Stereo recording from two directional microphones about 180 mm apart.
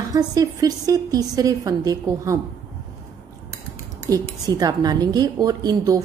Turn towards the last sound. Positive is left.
turn(degrees=-20)  # may be behind; listen again after turning